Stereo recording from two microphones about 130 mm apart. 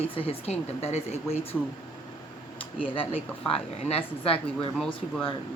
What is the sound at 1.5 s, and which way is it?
Speech, 5° left (ahead or behind).